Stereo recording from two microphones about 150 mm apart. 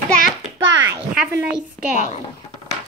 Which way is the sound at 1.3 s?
10° right (ahead or behind).